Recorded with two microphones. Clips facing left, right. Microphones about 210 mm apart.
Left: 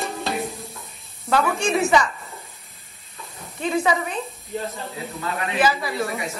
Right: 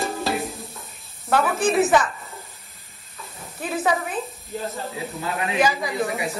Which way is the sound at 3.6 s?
5° right (ahead or behind).